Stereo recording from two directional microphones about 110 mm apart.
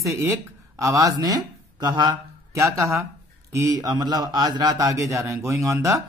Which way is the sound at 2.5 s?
30° right (ahead or behind).